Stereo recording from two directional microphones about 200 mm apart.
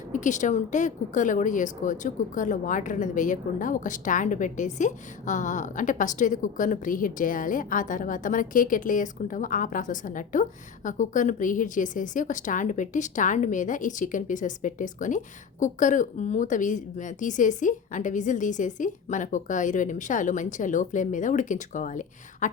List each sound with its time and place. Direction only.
0.1 s a woman's voice: 40° left (ahead or behind)